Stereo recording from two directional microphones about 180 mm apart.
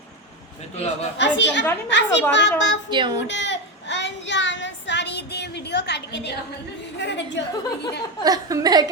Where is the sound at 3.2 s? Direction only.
80° left.